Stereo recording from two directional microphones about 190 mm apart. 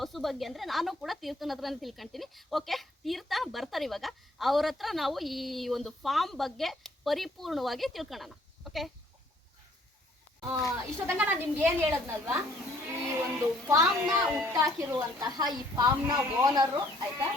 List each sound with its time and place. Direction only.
0.0 s speech: centre (ahead or behind)
10.4 s speech: 15° right (ahead or behind)
13.7 s speech: 15° right (ahead or behind)
14.3 s speech: 5° right (ahead or behind)
14.5 s speech: 20° right (ahead or behind)